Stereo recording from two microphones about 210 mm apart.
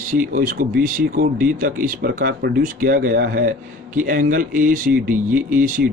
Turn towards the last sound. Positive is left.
turn(degrees=-40)  # may be behind; listen again after turning